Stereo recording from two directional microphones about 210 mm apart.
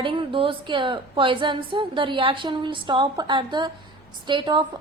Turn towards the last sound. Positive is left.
turn(degrees=-20)  # may be behind; listen again after turning